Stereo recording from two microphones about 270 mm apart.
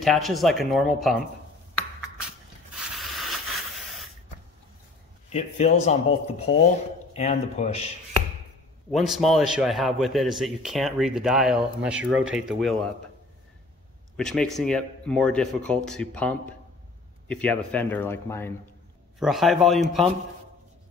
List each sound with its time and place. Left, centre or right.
0.0 s a man's voice: centre
2.2 s a sound: centre
5.3 s a man's voice: left
8.9 s a man's voice: centre
14.1 s a man's voice: centre